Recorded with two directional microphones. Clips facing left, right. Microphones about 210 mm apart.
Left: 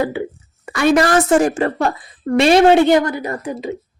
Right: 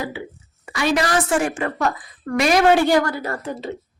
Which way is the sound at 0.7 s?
50° left (ahead or behind).